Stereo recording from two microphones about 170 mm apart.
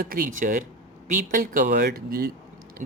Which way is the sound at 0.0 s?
55° right (ahead or behind).